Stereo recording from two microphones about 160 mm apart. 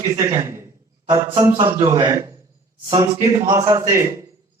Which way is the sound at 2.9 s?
35° right (ahead or behind).